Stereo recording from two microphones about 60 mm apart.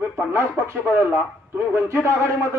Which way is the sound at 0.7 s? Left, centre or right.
Right.